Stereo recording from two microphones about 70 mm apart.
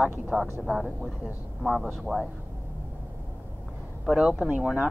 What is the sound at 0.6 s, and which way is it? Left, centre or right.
Speech, centre.